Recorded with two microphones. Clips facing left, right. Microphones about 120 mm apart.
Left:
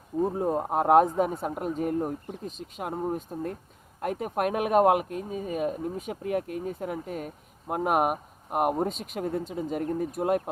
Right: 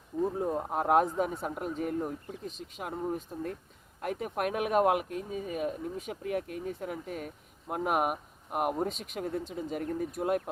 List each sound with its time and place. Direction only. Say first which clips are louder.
0.4 s speech: left 5 dB; 35° left (ahead or behind)